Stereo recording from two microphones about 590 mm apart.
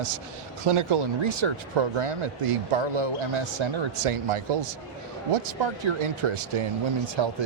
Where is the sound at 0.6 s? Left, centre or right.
Right.